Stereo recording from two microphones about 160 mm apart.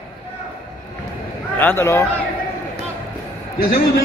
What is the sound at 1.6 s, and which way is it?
Speech, 15° left (ahead or behind).